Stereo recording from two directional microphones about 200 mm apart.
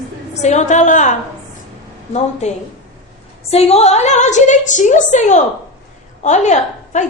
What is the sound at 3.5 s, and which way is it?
A woman's voice, 30° left (ahead or behind).